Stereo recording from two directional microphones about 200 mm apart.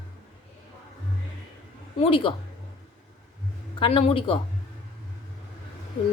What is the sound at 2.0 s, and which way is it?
Speech, 25° left (ahead or behind).